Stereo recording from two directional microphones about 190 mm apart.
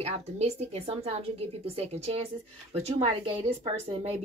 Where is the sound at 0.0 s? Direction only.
35° right (ahead or behind).